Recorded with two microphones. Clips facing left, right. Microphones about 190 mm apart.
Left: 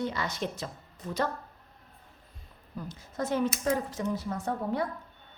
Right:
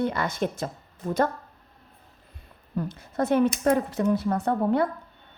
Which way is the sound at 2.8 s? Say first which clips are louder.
Right 7 dB; 60° right (ahead or behind).